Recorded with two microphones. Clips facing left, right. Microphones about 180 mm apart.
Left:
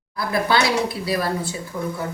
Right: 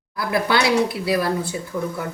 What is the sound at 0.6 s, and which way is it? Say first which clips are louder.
Speech: right 3 dB; 65° right (ahead or behind).